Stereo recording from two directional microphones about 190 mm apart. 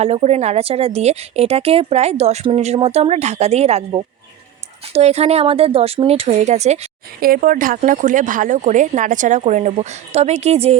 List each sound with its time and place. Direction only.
0.0 s speech: 35° right (ahead or behind)
7.2 s speech: 50° right (ahead or behind)